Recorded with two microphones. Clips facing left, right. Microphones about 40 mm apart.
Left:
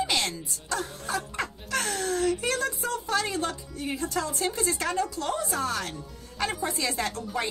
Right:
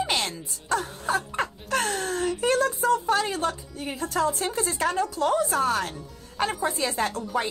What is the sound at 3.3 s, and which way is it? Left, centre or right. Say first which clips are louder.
Speech: right 3 dB; right.